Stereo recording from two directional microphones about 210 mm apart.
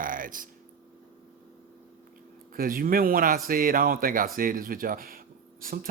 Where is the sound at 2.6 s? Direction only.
40° right (ahead or behind).